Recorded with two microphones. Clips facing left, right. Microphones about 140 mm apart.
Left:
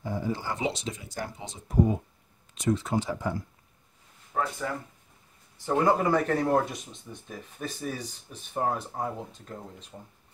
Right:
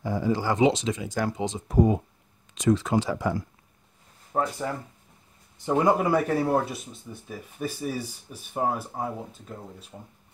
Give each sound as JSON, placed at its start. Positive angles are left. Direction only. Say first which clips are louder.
{"t": 0.0, "sound": "speech", "louder": "right 6 dB", "side_deg": -90}
{"t": 4.3, "sound": "speech", "louder": "right 3 dB", "side_deg": -35}
{"t": 5.6, "sound": "speech", "louder": "right 2 dB", "side_deg": -15}